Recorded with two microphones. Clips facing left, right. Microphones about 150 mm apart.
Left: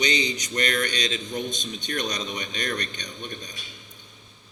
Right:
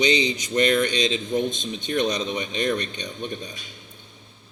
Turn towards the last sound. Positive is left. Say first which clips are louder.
# right 5 dB
turn(degrees=-30)  # may be behind; listen again after turning